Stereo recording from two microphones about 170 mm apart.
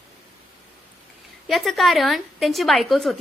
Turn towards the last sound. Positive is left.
turn(degrees=0)  # may be behind; listen again after turning